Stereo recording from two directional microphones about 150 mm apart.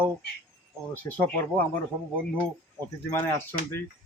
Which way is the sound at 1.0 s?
10° left (ahead or behind).